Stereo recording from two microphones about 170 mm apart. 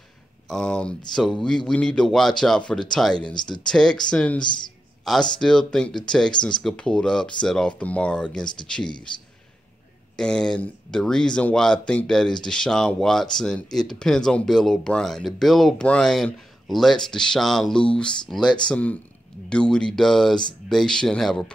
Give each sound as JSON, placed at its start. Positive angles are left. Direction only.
{"t": 0.5, "sound": "speech", "side_deg": 5}
{"t": 3.3, "sound": "speech", "side_deg": 25}
{"t": 3.6, "sound": "speech", "side_deg": 5}
{"t": 10.1, "sound": "speech", "side_deg": 5}